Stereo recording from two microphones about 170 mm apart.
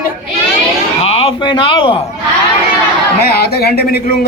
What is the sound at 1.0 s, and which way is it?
A man's voice, 35° left (ahead or behind).